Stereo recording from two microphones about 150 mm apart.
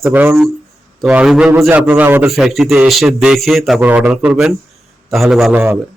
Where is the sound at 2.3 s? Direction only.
Centre (ahead or behind).